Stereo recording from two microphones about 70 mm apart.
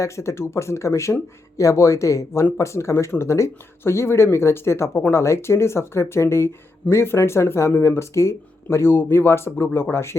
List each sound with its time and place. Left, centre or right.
0.0 s speech: left
8.6 s speech: left